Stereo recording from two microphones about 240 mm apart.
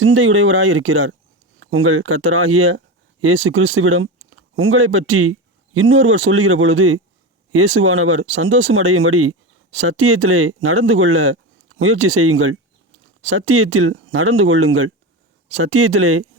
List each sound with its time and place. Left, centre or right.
0.0 s a man's voice: right